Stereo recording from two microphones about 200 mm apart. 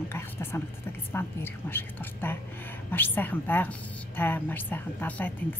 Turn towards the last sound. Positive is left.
turn(degrees=10)  # may be behind; listen again after turning